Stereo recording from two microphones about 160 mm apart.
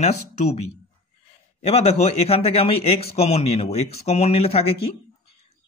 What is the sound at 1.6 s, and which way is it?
Speech, 40° left (ahead or behind).